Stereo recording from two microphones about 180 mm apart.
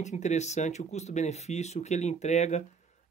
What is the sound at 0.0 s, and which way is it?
Speech, 40° left (ahead or behind).